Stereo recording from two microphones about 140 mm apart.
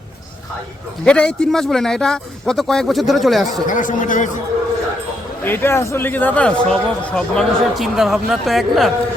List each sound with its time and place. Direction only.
1.0 s speech: 5° left (ahead or behind)
3.7 s speech: 70° left (ahead or behind)
5.4 s speech: 15° left (ahead or behind)